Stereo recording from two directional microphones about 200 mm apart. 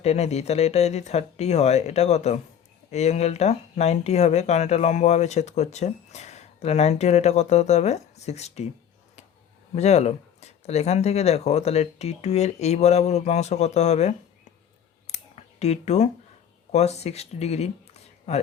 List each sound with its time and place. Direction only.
0.0 s speech: 35° left (ahead or behind)
9.7 s speech: 35° left (ahead or behind)
15.0 s a sound: 35° left (ahead or behind)
16.7 s speech: 35° left (ahead or behind)